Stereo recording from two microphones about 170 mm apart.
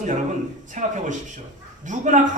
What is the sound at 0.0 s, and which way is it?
A woman's voice, 45° right (ahead or behind).